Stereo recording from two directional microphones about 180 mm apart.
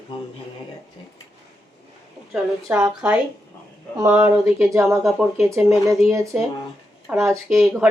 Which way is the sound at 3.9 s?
15° right (ahead or behind).